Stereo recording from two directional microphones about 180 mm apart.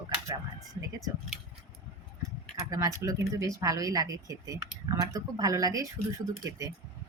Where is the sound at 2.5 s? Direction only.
20° right (ahead or behind).